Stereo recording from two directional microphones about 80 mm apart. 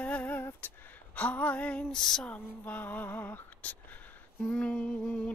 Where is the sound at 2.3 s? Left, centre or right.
Left.